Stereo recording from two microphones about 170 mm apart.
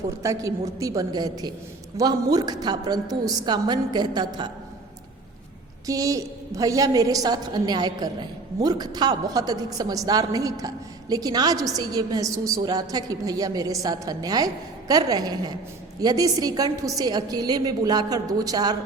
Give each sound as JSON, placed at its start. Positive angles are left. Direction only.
{"t": 0.2, "sound": "a woman's voice", "side_deg": -20}
{"t": 5.8, "sound": "a woman's voice", "side_deg": -20}